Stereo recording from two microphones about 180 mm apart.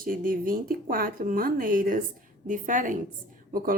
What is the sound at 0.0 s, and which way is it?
Speech, 50° right (ahead or behind).